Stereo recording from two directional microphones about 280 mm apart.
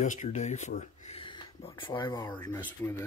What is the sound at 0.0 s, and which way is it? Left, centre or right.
Speech, left.